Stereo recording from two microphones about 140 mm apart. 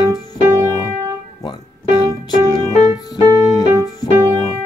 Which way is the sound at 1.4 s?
30° left (ahead or behind).